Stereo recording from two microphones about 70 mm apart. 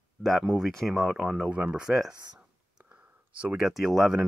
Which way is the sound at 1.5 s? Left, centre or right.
Centre.